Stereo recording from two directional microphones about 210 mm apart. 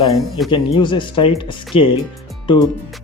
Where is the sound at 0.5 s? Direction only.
25° left (ahead or behind).